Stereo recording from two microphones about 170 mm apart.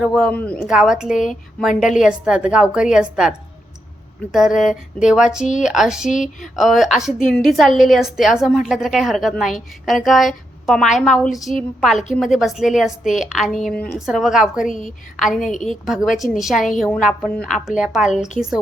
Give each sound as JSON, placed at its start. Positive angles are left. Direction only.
{"t": 0.0, "sound": "speech", "side_deg": 0}
{"t": 0.7, "sound": "a woman's voice", "side_deg": -5}
{"t": 6.1, "sound": "speech", "side_deg": 45}
{"t": 6.4, "sound": "a woman's voice", "side_deg": 0}
{"t": 14.7, "sound": "speech", "side_deg": 50}
{"t": 15.1, "sound": "a woman's voice", "side_deg": 0}